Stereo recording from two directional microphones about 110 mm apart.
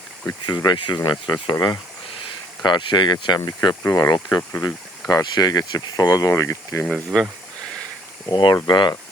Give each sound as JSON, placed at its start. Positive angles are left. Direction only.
{"t": 0.4, "sound": "speech", "side_deg": 40}
{"t": 2.6, "sound": "speech", "side_deg": 45}
{"t": 6.8, "sound": "speech", "side_deg": 0}
{"t": 8.3, "sound": "speech", "side_deg": 45}